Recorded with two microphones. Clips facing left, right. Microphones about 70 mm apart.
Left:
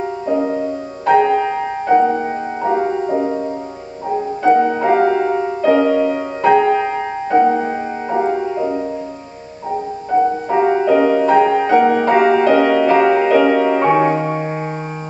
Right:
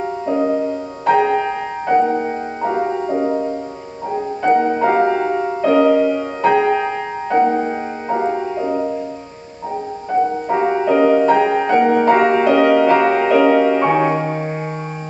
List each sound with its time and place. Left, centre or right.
1.0 s music: centre
1.9 s music: centre
4.5 s music: centre
4.9 s music: centre
10.5 s music: centre
13.7 s music: centre